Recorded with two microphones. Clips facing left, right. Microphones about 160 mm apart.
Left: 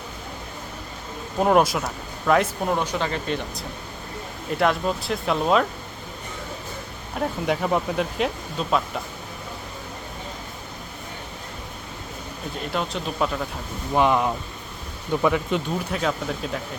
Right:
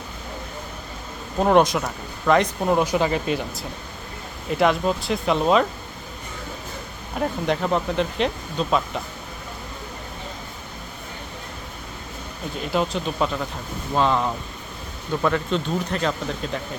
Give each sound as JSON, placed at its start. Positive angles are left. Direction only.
{"t": 1.4, "sound": "speech", "side_deg": 5}
{"t": 2.7, "sound": "speech", "side_deg": -10}
{"t": 7.2, "sound": "speech", "side_deg": 5}
{"t": 12.7, "sound": "speech", "side_deg": 0}
{"t": 13.9, "sound": "speech", "side_deg": 15}